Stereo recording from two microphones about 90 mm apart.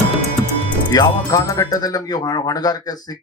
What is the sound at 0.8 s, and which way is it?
Speech, 50° left (ahead or behind).